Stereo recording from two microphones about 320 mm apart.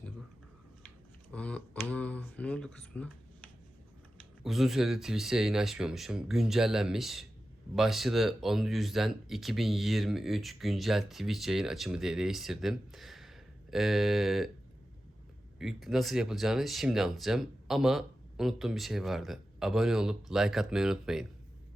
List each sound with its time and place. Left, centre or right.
1.3 s speech: centre
4.4 s speech: centre
15.5 s speech: centre